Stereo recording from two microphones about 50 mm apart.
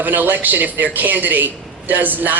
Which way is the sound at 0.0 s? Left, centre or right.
Right.